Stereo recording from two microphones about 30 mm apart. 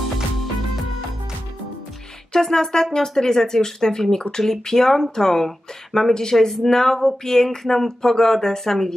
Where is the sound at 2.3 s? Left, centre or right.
Centre.